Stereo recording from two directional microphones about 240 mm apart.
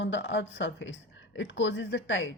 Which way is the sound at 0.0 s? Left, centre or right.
Left.